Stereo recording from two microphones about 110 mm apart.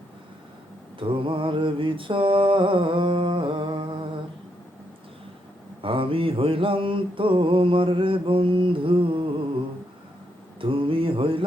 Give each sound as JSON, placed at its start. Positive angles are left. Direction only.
{"t": 0.9, "sound": "mantra", "side_deg": -50}
{"t": 5.8, "sound": "mantra", "side_deg": -55}
{"t": 10.6, "sound": "mantra", "side_deg": -50}